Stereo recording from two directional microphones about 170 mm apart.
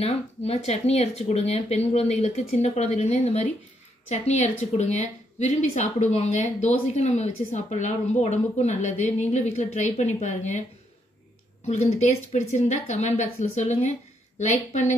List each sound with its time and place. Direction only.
0.5 s a woman's voice: 40° left (ahead or behind)
11.6 s a woman's voice: 40° left (ahead or behind)